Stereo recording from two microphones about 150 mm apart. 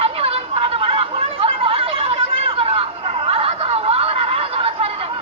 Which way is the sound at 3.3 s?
40° right (ahead or behind).